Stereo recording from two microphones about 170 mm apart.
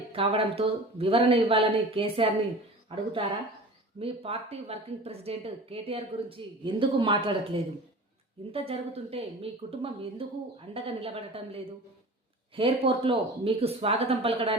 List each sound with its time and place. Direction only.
0.1 s speech: 30° right (ahead or behind)